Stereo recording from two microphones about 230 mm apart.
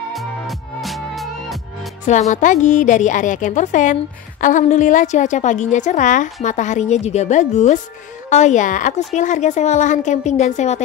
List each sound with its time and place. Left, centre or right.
0.1 s music: centre
2.0 s a woman's voice: left